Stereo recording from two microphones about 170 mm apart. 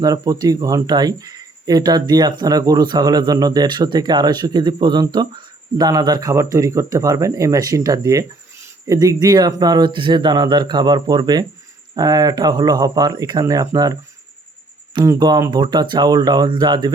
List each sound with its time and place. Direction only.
0.0 s speech: 20° right (ahead or behind)
15.0 s speech: 20° right (ahead or behind)